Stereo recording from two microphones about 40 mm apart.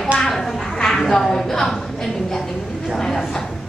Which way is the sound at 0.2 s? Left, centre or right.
Centre.